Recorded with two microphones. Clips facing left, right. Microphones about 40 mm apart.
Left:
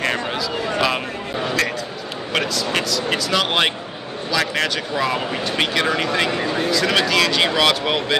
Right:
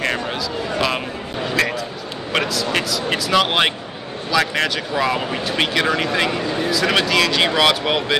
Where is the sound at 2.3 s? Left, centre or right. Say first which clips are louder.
Right 1 dB; centre.